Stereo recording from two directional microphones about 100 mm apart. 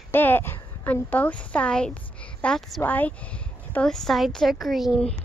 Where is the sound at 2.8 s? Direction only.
15° left (ahead or behind); by 5.0 s centre (ahead or behind).